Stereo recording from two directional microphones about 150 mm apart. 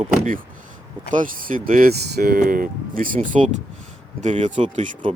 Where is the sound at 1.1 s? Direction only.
60° right (ahead or behind).